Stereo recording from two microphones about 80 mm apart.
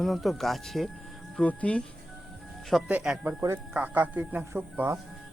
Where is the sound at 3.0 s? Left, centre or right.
Centre.